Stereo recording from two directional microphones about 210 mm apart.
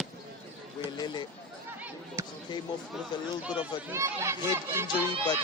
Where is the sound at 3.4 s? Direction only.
5° right (ahead or behind).